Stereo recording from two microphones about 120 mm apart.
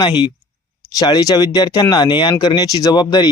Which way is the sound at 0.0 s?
40° left (ahead or behind).